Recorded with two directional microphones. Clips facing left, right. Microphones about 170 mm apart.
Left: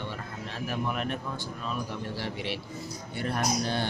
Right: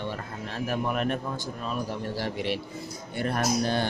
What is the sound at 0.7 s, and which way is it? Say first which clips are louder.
Speech: right 4 dB; 45° right (ahead or behind).